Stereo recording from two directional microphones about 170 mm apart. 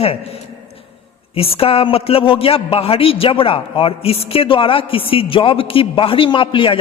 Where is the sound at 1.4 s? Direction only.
35° left (ahead or behind).